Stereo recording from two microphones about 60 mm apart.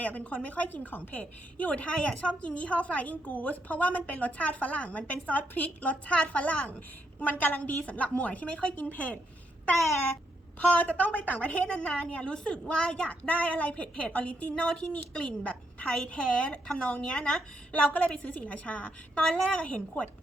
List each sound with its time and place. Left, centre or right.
0.0 s a woman's voice: left
9.7 s babbling: centre
10.8 s a woman's voice: left
11.3 s a woman's voice: centre
17.7 s a woman's voice: left